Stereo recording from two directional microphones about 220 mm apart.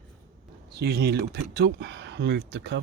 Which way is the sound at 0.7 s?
45° right (ahead or behind).